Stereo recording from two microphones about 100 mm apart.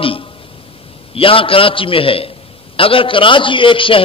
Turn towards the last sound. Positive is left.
turn(degrees=60)  # may be behind; listen again after turning